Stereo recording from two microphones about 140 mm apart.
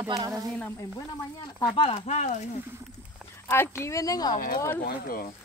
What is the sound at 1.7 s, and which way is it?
Speech, 40° left (ahead or behind).